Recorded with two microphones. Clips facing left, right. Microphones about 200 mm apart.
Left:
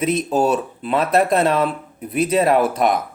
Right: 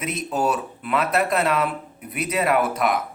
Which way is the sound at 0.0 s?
30° left (ahead or behind).